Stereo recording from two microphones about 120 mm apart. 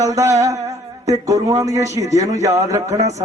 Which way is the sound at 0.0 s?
25° right (ahead or behind).